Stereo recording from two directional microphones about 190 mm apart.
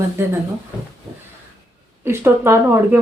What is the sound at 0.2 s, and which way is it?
Speech, 15° right (ahead or behind).